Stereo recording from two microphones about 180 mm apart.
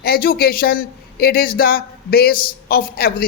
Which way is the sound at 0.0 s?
55° left (ahead or behind).